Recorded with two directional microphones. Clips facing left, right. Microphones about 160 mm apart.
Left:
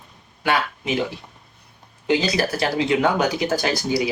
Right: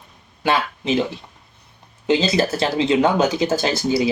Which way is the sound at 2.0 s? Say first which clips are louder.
Right 3 dB; 25° right (ahead or behind).